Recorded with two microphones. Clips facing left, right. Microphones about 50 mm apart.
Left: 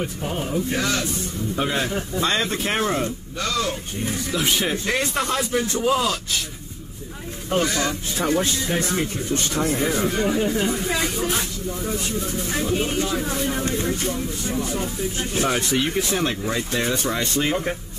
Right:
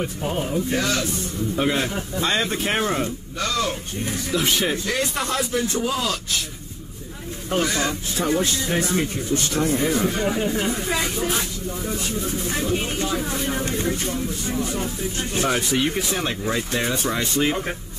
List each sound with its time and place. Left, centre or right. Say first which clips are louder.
0.0 s speech: right 1 dB; centre
4.8 s speech: left 1 dB; left
5.8 s speech: left 3 dB; centre
7.5 s speech: left 1 dB; centre